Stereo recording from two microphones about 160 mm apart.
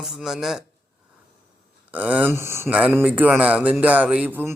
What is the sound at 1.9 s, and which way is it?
Speech, 10° right (ahead or behind).